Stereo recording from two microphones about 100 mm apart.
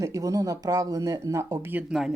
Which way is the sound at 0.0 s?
35° right (ahead or behind).